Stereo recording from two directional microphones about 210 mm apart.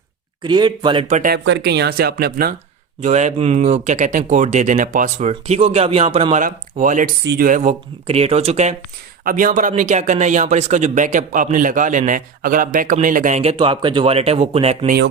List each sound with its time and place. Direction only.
0.4 s speech: 20° right (ahead or behind); by 1.4 s 40° right (ahead or behind)
1.5 s speech: 50° right (ahead or behind)
3.0 s speech: 35° right (ahead or behind)